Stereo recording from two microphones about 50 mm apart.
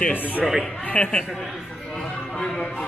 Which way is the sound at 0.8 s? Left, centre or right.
Left.